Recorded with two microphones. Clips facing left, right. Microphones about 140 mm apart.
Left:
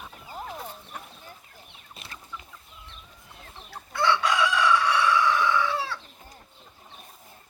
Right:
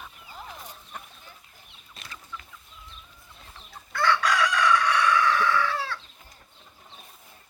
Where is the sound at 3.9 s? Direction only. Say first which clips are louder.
Even; 25° left (ahead or behind).